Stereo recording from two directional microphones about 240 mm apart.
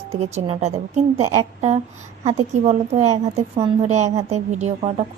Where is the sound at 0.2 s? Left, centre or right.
Right.